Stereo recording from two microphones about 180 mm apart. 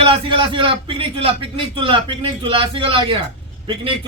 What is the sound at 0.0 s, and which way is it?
A man's voice, 30° right (ahead or behind).